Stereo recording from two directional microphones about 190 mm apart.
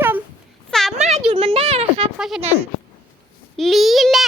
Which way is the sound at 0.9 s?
35° right (ahead or behind).